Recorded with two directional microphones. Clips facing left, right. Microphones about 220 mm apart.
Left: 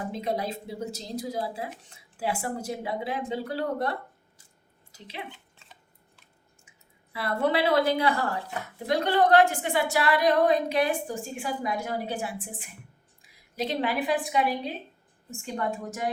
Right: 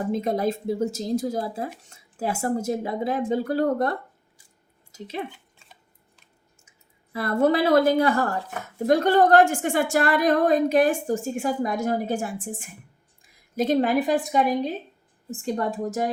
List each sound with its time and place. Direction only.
0.1 s speech: 45° right (ahead or behind)
6.7 s a woman's voice: 45° right (ahead or behind)